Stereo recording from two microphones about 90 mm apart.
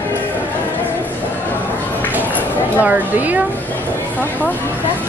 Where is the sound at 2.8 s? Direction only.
20° right (ahead or behind).